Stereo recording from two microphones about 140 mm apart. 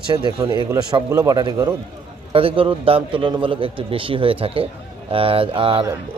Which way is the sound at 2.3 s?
40° right (ahead or behind).